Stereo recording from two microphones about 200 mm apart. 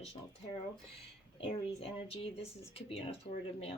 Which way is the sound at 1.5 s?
30° left (ahead or behind).